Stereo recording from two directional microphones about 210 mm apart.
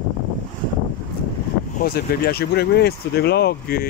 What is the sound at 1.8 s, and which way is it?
Speech, 45° left (ahead or behind).